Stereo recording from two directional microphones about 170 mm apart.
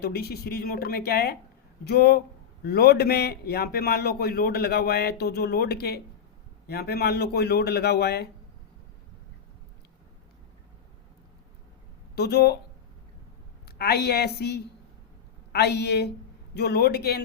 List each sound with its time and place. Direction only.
0.0 s a man's voice: 70° left (ahead or behind)
12.1 s speech: 75° left (ahead or behind)
13.7 s a man's voice: 70° left (ahead or behind)